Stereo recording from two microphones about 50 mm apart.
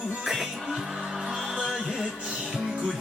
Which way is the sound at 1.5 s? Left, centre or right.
Centre.